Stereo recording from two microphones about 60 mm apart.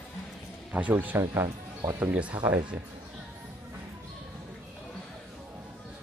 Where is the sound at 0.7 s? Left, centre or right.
Right.